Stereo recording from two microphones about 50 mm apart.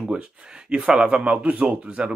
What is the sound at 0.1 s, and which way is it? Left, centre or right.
Speech, centre.